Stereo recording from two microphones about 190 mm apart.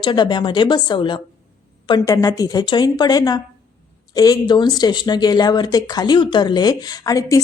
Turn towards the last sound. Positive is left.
turn(degrees=20)  # may be behind; listen again after turning